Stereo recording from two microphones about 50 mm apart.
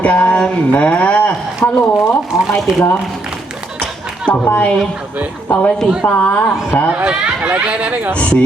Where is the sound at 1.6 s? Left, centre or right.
Left.